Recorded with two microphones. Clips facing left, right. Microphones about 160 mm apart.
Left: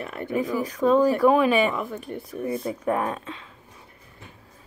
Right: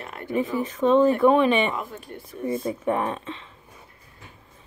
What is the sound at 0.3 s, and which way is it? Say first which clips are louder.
A woman's voice: right 1 dB; centre (ahead or behind).